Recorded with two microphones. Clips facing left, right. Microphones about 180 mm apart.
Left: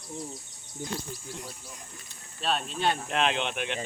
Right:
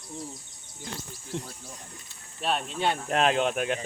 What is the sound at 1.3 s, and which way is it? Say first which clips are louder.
Speech: right 11 dB; 80° right.